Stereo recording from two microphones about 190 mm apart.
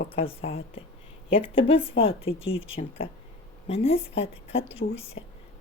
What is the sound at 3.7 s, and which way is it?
A woman's voice, 30° left (ahead or behind).